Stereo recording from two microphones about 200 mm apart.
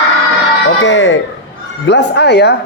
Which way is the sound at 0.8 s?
70° left (ahead or behind).